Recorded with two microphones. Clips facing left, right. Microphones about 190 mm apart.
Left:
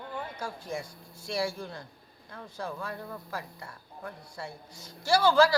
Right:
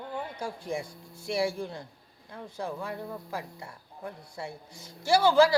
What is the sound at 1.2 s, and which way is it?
Speech, 25° right (ahead or behind).